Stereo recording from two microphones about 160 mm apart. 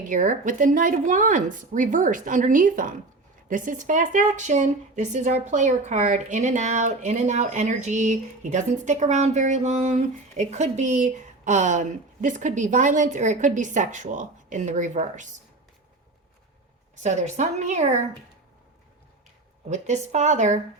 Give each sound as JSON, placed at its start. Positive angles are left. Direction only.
{"t": 0.0, "sound": "a woman's voice", "side_deg": -55}
{"t": 16.9, "sound": "a woman's voice", "side_deg": -45}
{"t": 19.7, "sound": "a woman's voice", "side_deg": -50}